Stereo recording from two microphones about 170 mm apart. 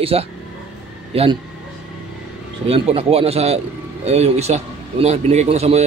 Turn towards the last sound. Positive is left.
turn(degrees=-40)  # may be behind; listen again after turning